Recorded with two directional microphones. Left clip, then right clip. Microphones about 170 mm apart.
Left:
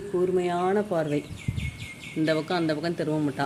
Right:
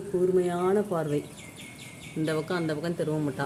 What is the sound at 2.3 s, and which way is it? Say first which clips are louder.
A woman's voice: left 4 dB; 5° left (ahead or behind).